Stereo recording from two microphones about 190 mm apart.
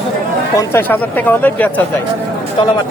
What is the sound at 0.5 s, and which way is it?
Speech, 10° left (ahead or behind).